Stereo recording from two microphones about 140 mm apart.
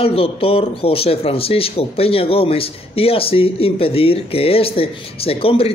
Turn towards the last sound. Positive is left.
turn(degrees=40)  # may be behind; listen again after turning